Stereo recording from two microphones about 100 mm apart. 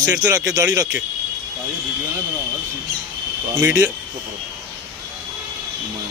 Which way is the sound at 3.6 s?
20° right (ahead or behind).